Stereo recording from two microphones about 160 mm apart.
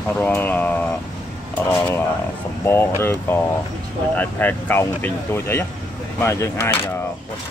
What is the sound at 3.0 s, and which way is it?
Speech, 15° left (ahead or behind).